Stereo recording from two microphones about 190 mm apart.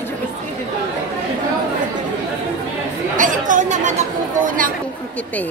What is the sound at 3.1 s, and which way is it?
Chatter, 45° right (ahead or behind).